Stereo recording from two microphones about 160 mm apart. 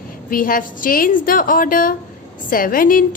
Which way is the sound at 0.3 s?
60° left (ahead or behind).